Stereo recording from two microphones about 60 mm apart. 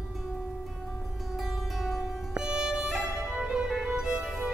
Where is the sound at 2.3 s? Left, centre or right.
Centre.